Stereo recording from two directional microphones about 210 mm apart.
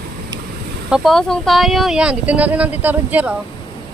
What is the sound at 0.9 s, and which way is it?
Speech, centre (ahead or behind).